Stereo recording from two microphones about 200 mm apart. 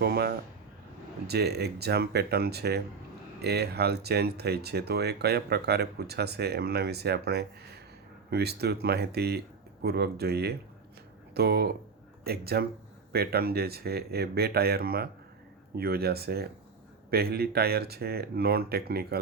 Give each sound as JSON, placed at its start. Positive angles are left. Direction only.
{"t": 0.0, "sound": "speech", "side_deg": -50}